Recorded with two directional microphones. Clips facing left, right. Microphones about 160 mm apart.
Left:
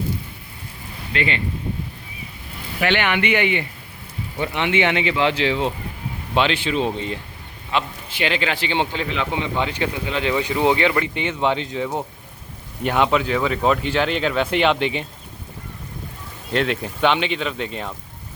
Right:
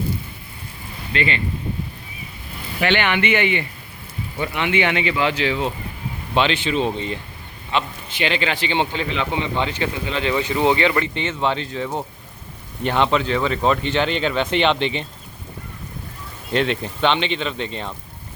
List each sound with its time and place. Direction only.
1.1 s speech: 10° left (ahead or behind)
2.8 s speech: 5° left (ahead or behind); by 5.7 s 25° left (ahead or behind)
6.3 s speech: 5° left (ahead or behind)
16.5 s speech: centre (ahead or behind)